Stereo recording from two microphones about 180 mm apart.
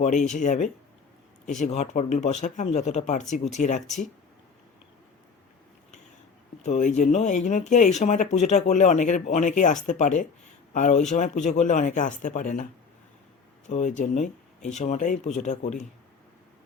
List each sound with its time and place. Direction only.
0.0 s speech: 40° left (ahead or behind)
6.6 s speech: 45° left (ahead or behind)
13.7 s speech: 45° left (ahead or behind)